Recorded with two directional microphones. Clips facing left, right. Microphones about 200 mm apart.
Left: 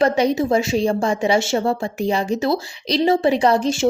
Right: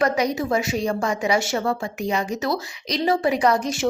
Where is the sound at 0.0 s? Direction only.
25° left (ahead or behind).